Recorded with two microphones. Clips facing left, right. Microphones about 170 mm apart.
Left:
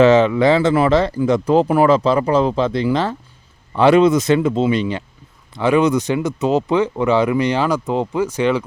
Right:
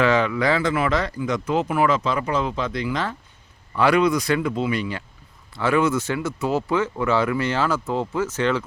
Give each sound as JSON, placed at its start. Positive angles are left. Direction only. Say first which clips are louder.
{"t": 0.0, "sound": "speech", "louder": "left 8 dB", "side_deg": 25}